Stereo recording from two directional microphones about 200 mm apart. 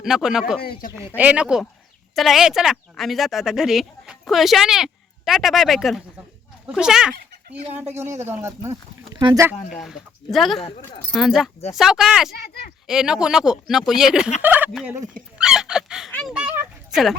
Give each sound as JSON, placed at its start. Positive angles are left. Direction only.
{"t": 0.0, "sound": "speech", "side_deg": 0}
{"t": 0.6, "sound": "speech", "side_deg": 50}
{"t": 1.0, "sound": "speech", "side_deg": -10}
{"t": 9.8, "sound": "speech", "side_deg": 0}
{"t": 10.6, "sound": "speech", "side_deg": 25}
{"t": 11.1, "sound": "speech", "side_deg": 0}
{"t": 15.4, "sound": "fowl", "side_deg": -5}